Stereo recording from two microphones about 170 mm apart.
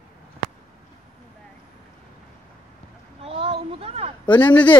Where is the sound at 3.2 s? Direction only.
35° right (ahead or behind).